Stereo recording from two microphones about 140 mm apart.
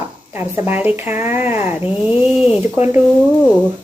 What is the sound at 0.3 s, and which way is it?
Speech, 15° right (ahead or behind).